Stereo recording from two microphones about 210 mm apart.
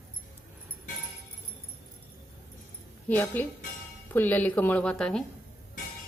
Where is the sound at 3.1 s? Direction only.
10° left (ahead or behind).